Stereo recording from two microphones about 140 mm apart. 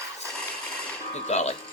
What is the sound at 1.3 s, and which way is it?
Speech, 55° left (ahead or behind).